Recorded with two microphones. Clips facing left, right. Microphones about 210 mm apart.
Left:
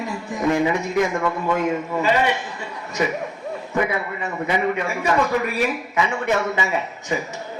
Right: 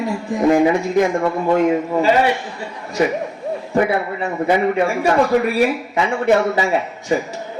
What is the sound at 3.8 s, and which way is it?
Speech, 35° right (ahead or behind).